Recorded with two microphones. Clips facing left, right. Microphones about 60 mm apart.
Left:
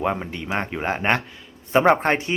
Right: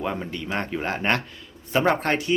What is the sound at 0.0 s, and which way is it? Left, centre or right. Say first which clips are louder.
Speech: left 4 dB; left.